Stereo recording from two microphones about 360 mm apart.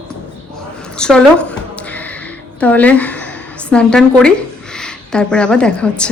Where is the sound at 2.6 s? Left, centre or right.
Centre.